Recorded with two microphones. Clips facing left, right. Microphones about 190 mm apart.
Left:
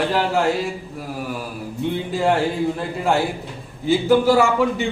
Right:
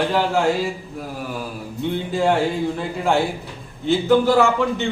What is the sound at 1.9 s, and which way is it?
A man's voice, 5° left (ahead or behind).